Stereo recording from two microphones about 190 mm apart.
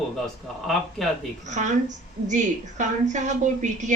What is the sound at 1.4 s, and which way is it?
A woman's voice, 40° right (ahead or behind).